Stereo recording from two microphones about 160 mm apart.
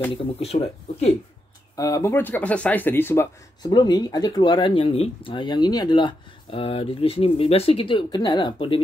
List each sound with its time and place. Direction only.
0.1 s speech: 40° left (ahead or behind)
1.8 s speech: 20° left (ahead or behind)
3.6 s speech: 25° left (ahead or behind)